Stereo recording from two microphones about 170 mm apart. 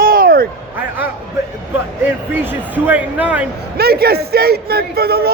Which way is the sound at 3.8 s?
65° right (ahead or behind).